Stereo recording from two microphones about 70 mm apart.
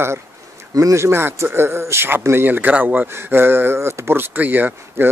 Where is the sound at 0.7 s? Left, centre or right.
Right.